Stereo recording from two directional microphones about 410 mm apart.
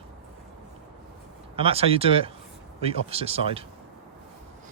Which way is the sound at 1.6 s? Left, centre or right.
Centre.